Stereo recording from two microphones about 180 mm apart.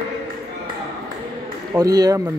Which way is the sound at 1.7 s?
20° right (ahead or behind).